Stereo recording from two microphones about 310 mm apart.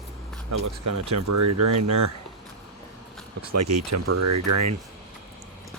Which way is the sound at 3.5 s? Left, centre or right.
Right.